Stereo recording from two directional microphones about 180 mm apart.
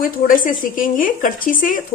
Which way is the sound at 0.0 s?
50° left (ahead or behind).